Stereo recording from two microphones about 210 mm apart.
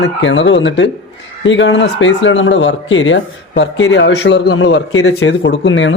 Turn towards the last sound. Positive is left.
turn(degrees=60)  # may be behind; listen again after turning